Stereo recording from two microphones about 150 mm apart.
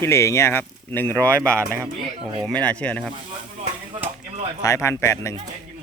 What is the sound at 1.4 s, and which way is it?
Speech, 20° right (ahead or behind).